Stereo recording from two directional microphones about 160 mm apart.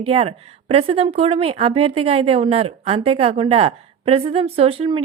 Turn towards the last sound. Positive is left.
turn(degrees=-35)  # may be behind; listen again after turning